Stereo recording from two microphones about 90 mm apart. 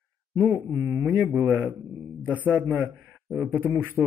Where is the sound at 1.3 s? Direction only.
25° right (ahead or behind).